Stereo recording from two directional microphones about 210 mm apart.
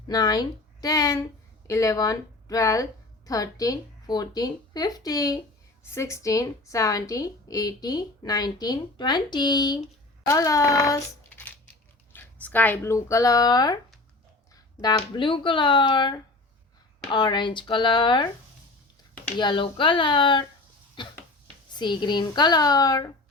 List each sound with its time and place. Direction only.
0.1 s a woman's voice: 20° left (ahead or behind)
19.4 s speech: 25° left (ahead or behind)